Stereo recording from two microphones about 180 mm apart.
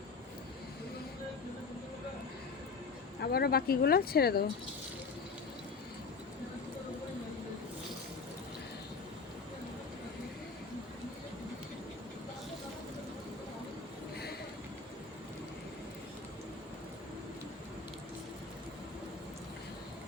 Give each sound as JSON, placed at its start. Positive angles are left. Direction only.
{"t": 3.2, "sound": "speech", "side_deg": 60}